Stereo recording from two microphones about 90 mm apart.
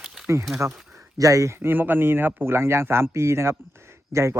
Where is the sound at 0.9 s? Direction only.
35° right (ahead or behind).